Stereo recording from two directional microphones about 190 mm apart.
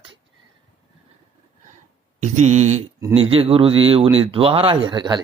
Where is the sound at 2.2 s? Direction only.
35° right (ahead or behind).